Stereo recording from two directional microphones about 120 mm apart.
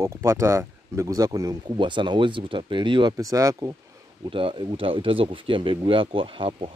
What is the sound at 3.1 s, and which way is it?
Speech, 30° right (ahead or behind).